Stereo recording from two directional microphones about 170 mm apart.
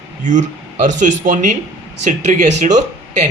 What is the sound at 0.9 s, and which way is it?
A man's voice, 50° right (ahead or behind).